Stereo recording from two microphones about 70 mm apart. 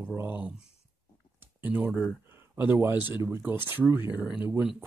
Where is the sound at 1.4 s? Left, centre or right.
Right.